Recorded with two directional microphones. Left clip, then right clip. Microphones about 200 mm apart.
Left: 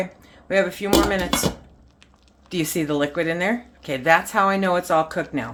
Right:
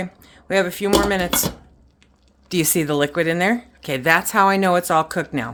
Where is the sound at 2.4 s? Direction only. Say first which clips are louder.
Right 4 dB; 55° right (ahead or behind).